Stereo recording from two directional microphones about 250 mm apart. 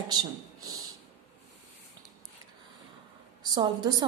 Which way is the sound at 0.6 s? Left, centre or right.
Right.